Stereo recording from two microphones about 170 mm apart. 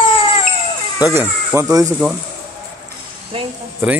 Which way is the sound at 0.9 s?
15° right (ahead or behind).